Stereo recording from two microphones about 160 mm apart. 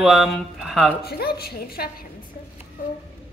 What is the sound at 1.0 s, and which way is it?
Speech, 75° left (ahead or behind).